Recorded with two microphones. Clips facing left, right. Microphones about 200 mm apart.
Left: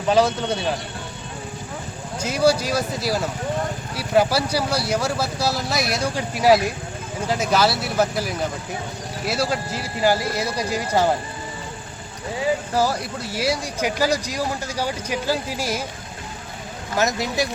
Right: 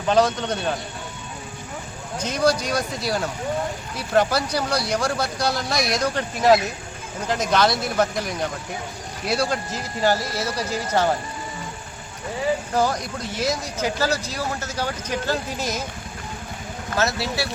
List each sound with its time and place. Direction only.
0.1 s speech: 5° left (ahead or behind)
2.2 s speech: 5° left (ahead or behind)
12.7 s speech: 5° left (ahead or behind)
17.0 s speech: 15° left (ahead or behind)